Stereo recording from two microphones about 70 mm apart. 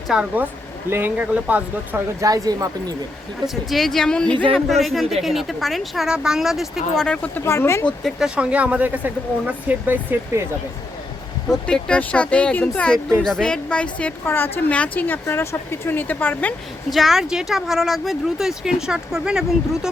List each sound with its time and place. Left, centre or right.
0.1 s speech: centre
0.9 s speech: right
2.2 s speech: right
3.4 s speech: centre
4.5 s speech: centre
6.1 s speech: centre
6.9 s speech: centre
7.4 s speech: left
8.4 s speech: centre
11.4 s speech: centre
14.3 s speech: left
14.7 s speech: centre
16.9 s speech: centre